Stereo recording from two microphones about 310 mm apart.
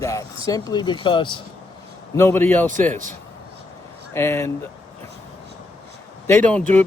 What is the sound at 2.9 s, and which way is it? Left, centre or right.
Speech, right.